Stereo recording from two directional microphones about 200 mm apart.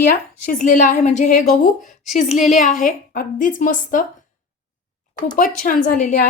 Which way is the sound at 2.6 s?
40° left (ahead or behind).